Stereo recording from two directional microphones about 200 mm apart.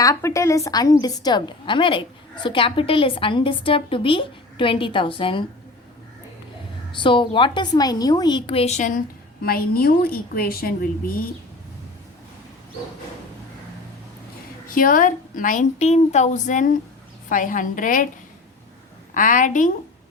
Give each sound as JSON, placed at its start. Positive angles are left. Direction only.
{"t": 0.0, "sound": "a woman's voice", "side_deg": 15}
{"t": 6.9, "sound": "a woman's voice", "side_deg": 25}
{"t": 9.4, "sound": "a woman's voice", "side_deg": 50}
{"t": 14.7, "sound": "a woman's voice", "side_deg": 45}
{"t": 19.1, "sound": "a woman's voice", "side_deg": 40}